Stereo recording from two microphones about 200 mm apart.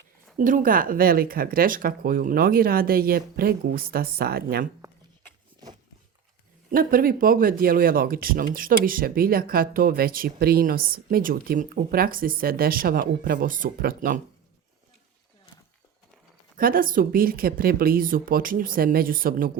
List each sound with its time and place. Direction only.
0.3 s speech: 40° right (ahead or behind)
6.7 s speech: 45° right (ahead or behind)
16.6 s speech: 45° right (ahead or behind)